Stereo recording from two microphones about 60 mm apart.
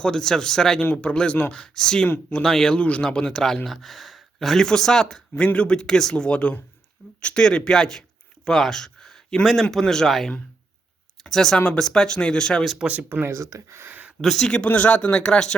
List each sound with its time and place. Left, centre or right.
0.0 s speech: centre
12.8 s speech: right
13.1 s speech: right
13.3 s speech: right
13.8 s a sound: right
14.2 s speech: centre